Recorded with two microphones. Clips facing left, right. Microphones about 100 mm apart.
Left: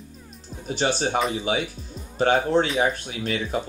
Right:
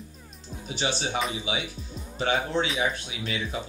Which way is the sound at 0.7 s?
45° left (ahead or behind).